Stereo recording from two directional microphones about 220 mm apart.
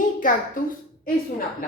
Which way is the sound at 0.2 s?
40° left (ahead or behind).